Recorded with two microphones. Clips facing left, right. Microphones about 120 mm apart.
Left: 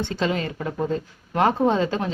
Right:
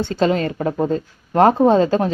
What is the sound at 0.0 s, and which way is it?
Speech, 40° right (ahead or behind).